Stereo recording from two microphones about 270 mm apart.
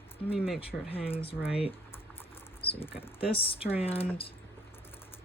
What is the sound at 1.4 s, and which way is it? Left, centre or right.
Speech, centre.